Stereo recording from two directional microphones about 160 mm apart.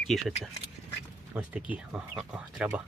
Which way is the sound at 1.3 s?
10° right (ahead or behind).